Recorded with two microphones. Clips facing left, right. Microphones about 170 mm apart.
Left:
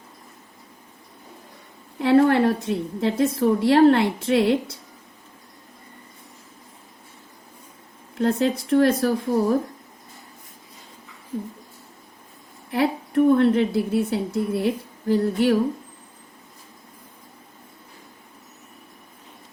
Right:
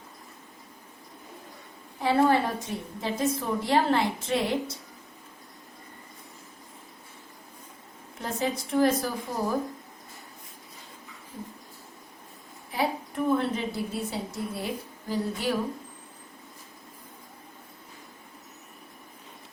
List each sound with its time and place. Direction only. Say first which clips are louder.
2.0 s a woman's voice: left 6 dB; 65° left (ahead or behind)
8.2 s a woman's voice: left 9 dB; 65° left (ahead or behind)
12.7 s a woman's voice: left 8 dB; 65° left (ahead or behind)